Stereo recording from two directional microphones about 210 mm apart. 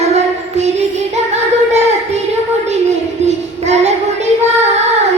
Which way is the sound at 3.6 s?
30° right (ahead or behind).